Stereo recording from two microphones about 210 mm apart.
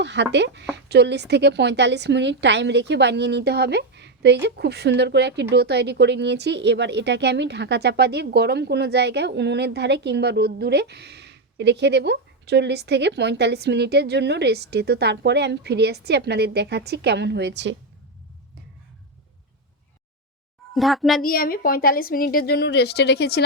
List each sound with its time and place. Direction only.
0.0 s a woman's voice: 55° right (ahead or behind)
20.7 s a child's voice: centre (ahead or behind)
21.2 s a woman's voice: 45° left (ahead or behind)